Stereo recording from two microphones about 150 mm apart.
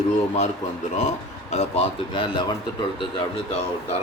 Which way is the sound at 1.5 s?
45° left (ahead or behind).